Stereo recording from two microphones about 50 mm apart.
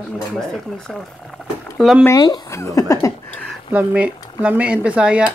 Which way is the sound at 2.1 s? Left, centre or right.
Left.